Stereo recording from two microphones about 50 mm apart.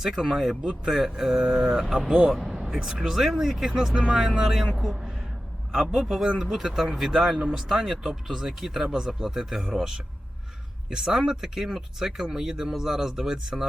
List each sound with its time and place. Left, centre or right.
0.0 s a man's voice: centre
10.8 s speech: centre